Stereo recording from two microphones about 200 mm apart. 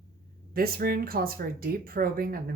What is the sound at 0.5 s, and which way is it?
Speech, 50° right (ahead or behind).